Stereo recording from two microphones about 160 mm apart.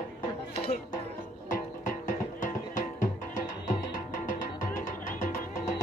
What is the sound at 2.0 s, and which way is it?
Music, 55° left (ahead or behind).